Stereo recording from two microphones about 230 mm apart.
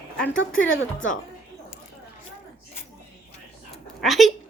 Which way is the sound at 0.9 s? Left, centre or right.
Left.